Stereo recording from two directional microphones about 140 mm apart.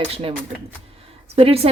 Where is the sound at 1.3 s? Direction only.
45° right (ahead or behind).